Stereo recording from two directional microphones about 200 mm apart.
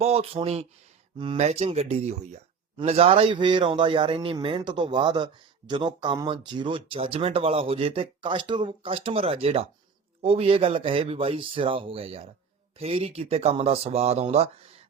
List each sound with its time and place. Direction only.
0.0 s speech: 30° right (ahead or behind)